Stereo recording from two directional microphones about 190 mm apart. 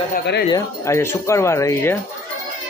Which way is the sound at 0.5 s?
15° left (ahead or behind).